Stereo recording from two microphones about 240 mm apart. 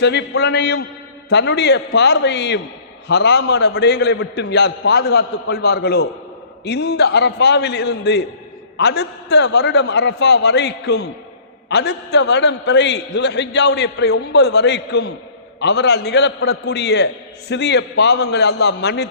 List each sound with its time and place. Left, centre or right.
0.0 s a man's voice: left